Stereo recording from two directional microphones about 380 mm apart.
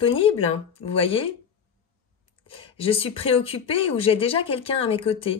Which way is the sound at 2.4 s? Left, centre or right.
Centre.